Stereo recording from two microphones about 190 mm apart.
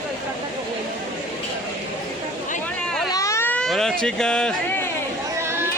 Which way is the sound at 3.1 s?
15° left (ahead or behind).